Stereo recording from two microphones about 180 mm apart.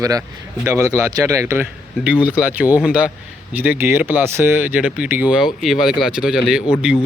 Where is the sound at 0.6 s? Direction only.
15° right (ahead or behind).